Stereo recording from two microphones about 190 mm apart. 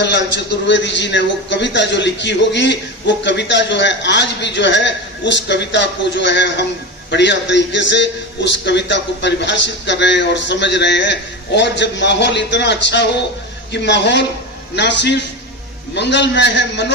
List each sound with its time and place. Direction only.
0.0 s a man's voice: 65° left (ahead or behind)